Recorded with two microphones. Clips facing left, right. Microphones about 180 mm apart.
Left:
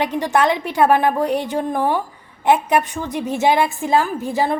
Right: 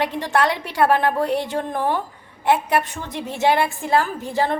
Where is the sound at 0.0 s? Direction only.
15° left (ahead or behind).